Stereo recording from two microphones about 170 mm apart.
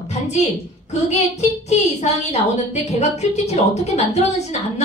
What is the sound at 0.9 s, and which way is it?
A woman's voice, 40° left (ahead or behind).